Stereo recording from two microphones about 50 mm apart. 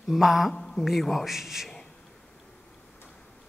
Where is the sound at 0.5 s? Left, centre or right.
Centre.